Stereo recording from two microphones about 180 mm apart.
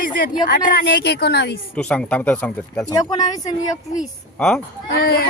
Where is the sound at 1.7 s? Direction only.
5° left (ahead or behind).